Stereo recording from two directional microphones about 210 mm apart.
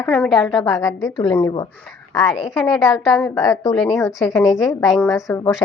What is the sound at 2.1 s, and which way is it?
A woman's voice, centre (ahead or behind).